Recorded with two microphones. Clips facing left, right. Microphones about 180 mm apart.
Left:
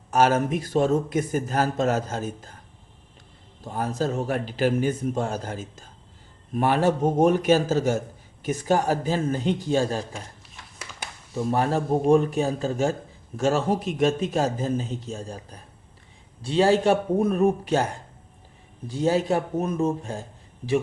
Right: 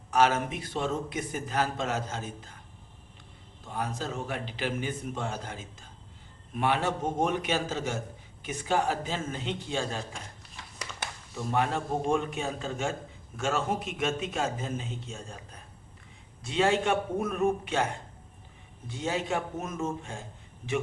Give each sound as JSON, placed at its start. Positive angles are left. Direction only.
{"t": 0.1, "sound": "a man's voice", "side_deg": 45}
{"t": 3.6, "sound": "a man's voice", "side_deg": 40}
{"t": 10.1, "sound": "a sound", "side_deg": 5}
{"t": 11.3, "sound": "a man's voice", "side_deg": 40}
{"t": 18.9, "sound": "a man's voice", "side_deg": 35}